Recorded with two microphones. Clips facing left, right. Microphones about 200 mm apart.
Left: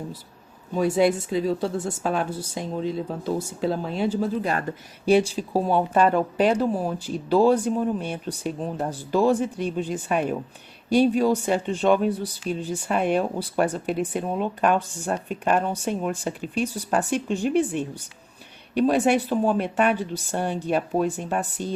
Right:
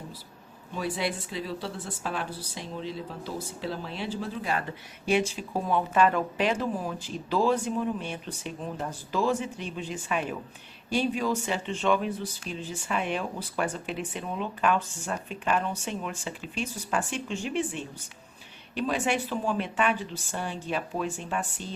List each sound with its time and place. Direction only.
0.7 s speech: 45° left (ahead or behind)
20.3 s speech: 55° left (ahead or behind)